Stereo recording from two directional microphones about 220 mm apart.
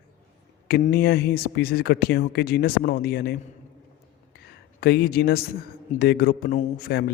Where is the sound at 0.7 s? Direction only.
45° left (ahead or behind).